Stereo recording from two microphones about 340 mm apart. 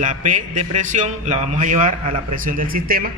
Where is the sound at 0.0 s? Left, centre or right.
Right.